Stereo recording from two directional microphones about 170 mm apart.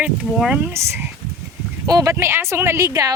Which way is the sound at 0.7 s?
15° right (ahead or behind).